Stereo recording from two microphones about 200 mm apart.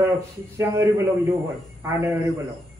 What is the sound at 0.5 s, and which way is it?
Speech, 15° right (ahead or behind).